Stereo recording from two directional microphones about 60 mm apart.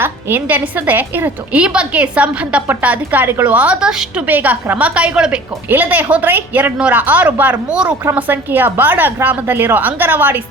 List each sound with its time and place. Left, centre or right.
0.0 s a woman's voice: right
1.5 s a woman's voice: centre
4.3 s a woman's voice: right; by 5.4 s centre
5.6 s a woman's voice: right
7.7 s a woman's voice: centre
8.1 s a woman's voice: right